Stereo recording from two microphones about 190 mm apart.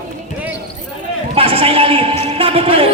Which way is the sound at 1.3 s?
30° right (ahead or behind).